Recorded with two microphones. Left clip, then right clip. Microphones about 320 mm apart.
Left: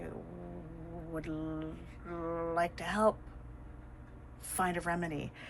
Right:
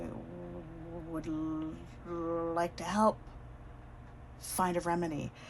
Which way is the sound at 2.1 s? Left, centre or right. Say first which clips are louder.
Right 1 dB; centre.